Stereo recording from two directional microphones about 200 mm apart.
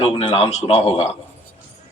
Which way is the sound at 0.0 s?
30° left (ahead or behind).